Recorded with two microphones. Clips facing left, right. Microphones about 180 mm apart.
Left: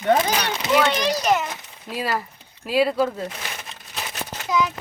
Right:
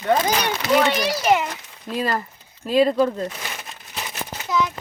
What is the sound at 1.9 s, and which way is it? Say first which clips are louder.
Speech: right 2 dB; 10° left (ahead or behind).